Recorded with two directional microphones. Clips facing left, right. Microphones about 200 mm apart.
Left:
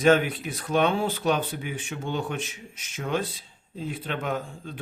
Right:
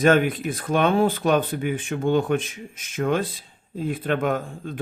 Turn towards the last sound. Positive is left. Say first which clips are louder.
# right 4 dB
turn(degrees=-50)  # may be behind; listen again after turning